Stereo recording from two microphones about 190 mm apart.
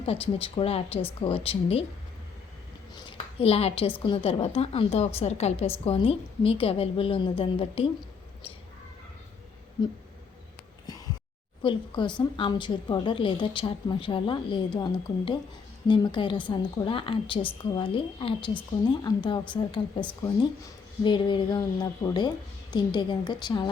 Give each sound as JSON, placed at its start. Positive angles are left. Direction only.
{"t": 0.0, "sound": "a woman's voice", "side_deg": 30}
{"t": 2.9, "sound": "a woman's voice", "side_deg": 30}
{"t": 10.8, "sound": "a sound", "side_deg": 20}
{"t": 11.6, "sound": "a woman's voice", "side_deg": 25}